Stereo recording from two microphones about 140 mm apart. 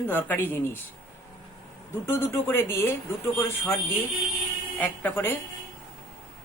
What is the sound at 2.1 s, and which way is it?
Speech, 20° left (ahead or behind).